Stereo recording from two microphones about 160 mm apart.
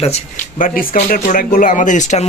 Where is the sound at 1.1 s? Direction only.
55° left (ahead or behind).